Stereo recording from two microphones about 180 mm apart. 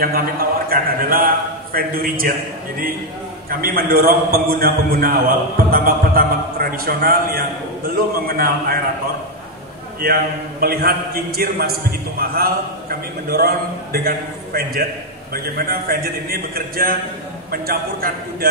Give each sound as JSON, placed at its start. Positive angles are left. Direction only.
{"t": 0.0, "sound": "a man's voice", "side_deg": -55}
{"t": 3.4, "sound": "a man's voice", "side_deg": -55}
{"t": 10.0, "sound": "a man's voice", "side_deg": -55}